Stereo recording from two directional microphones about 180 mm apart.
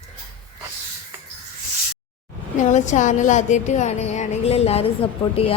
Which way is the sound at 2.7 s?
40° left (ahead or behind).